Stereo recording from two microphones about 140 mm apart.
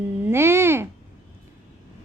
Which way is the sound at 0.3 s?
15° right (ahead or behind).